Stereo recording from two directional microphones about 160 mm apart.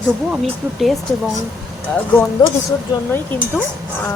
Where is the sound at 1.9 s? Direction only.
10° left (ahead or behind).